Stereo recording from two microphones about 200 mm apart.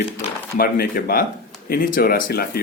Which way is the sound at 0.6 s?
45° left (ahead or behind).